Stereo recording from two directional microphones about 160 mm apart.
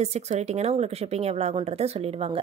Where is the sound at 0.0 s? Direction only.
45° right (ahead or behind).